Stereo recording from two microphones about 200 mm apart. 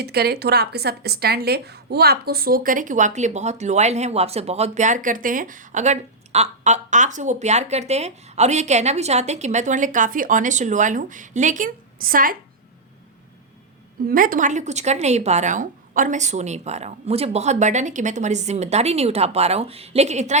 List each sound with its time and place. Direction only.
0.0 s speech: 50° right (ahead or behind)
14.1 s speech: 45° right (ahead or behind)